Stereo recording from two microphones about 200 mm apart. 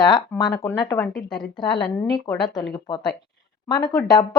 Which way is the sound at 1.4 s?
20° left (ahead or behind).